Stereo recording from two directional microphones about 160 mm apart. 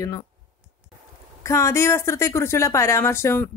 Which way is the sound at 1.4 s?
20° left (ahead or behind).